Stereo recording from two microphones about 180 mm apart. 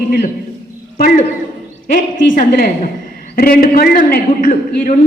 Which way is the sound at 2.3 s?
50° left (ahead or behind).